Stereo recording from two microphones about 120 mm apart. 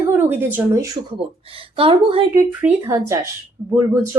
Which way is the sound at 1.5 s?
50° right (ahead or behind).